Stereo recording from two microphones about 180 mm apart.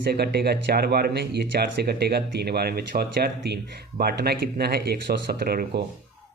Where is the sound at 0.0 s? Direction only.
60° right (ahead or behind).